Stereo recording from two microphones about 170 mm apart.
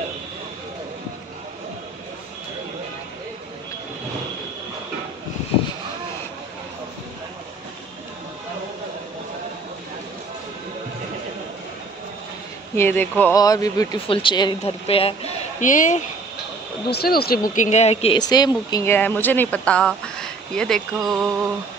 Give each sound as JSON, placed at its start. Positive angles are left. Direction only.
{"t": 12.7, "sound": "speech", "side_deg": 10}
{"t": 15.6, "sound": "speech", "side_deg": 50}
{"t": 16.9, "sound": "speech", "side_deg": 65}
{"t": 17.6, "sound": "speech", "side_deg": 40}
{"t": 18.3, "sound": "speech", "side_deg": 25}